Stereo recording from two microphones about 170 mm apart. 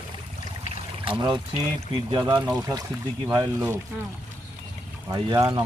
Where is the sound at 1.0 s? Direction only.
30° right (ahead or behind).